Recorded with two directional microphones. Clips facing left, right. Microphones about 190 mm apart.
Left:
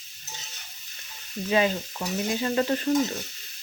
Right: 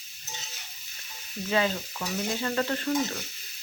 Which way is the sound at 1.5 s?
20° left (ahead or behind).